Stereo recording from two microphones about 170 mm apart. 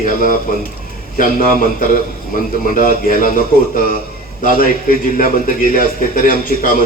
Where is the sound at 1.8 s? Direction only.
55° left (ahead or behind).